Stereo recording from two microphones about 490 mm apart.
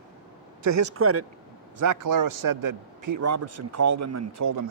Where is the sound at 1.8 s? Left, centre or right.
Right.